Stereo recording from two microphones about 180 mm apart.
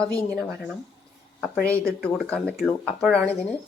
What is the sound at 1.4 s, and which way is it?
Speech, 5° left (ahead or behind).